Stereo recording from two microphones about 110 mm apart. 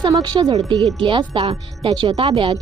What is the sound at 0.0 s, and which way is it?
Speech, 40° right (ahead or behind).